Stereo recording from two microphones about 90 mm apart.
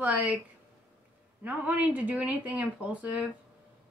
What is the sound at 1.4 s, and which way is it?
A woman's voice, 20° right (ahead or behind).